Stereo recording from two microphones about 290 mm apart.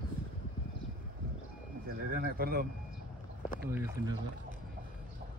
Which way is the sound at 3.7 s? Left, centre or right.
Centre.